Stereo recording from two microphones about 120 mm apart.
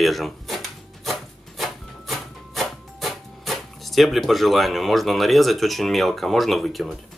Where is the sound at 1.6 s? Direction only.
Centre (ahead or behind).